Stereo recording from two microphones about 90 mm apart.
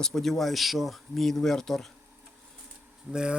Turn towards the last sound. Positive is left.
turn(degrees=-10)  # may be behind; listen again after turning